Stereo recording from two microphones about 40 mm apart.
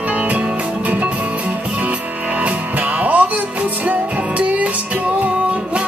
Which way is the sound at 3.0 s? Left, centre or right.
Right.